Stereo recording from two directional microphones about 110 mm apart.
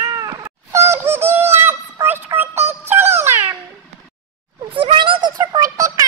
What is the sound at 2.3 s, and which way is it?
Synthetic singing, 20° right (ahead or behind).